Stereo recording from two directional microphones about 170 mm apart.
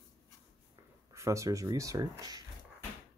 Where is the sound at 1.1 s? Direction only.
15° right (ahead or behind).